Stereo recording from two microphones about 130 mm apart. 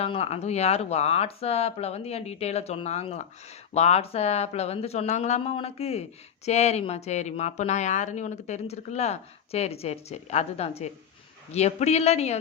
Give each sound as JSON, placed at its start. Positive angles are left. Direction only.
{"t": 0.0, "sound": "speech", "side_deg": 50}